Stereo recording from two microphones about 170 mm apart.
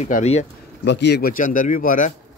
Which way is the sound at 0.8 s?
80° left.